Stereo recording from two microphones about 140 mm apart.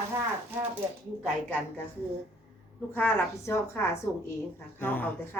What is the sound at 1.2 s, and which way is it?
Speech, 10° left (ahead or behind).